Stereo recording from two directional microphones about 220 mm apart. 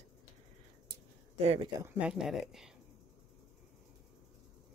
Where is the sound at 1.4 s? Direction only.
30° right (ahead or behind).